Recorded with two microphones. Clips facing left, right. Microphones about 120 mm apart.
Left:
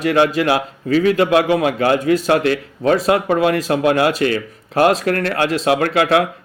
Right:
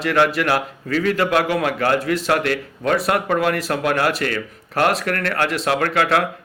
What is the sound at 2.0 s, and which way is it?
Speech, 90° right.